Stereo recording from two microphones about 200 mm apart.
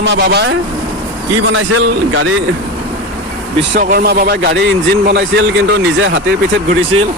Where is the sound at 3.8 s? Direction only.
50° right (ahead or behind).